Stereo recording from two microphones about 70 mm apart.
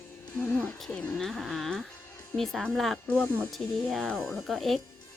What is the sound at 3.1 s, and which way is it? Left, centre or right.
Speech, left.